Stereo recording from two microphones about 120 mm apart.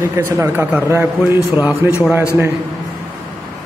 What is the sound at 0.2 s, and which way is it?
A man's voice, 20° right (ahead or behind).